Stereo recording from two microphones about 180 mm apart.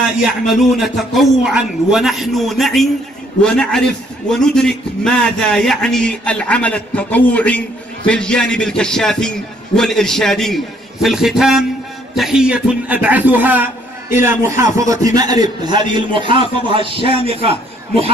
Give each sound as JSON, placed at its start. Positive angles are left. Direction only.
{"t": 0.5, "sound": "a man's voice", "side_deg": 0}